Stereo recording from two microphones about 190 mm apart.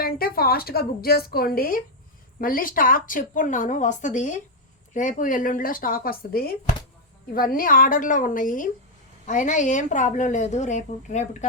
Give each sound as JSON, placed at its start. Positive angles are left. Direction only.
{"t": 0.0, "sound": "a woman's voice", "side_deg": 50}